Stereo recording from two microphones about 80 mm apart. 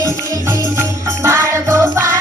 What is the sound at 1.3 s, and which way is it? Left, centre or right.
Music, right.